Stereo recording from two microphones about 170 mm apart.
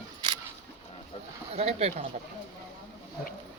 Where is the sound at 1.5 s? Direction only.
35° right (ahead or behind).